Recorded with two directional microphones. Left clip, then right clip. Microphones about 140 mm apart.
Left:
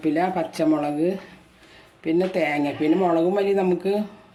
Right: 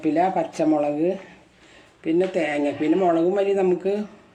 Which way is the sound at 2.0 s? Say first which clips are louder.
Even; 45° left (ahead or behind).